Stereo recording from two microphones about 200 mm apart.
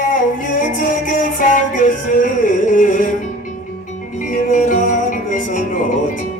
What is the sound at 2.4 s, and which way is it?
Carnatic music, 40° left (ahead or behind).